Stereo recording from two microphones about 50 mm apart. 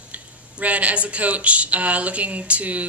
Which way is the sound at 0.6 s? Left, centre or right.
Right.